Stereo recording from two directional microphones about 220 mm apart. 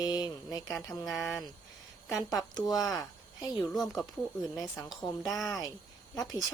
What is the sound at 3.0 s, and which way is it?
Cricket, 15° left (ahead or behind).